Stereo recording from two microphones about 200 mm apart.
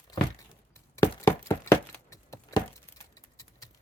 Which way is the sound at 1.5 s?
15° left (ahead or behind).